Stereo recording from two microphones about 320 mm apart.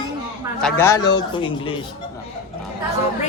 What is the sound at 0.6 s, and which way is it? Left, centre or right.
A man's voice, centre.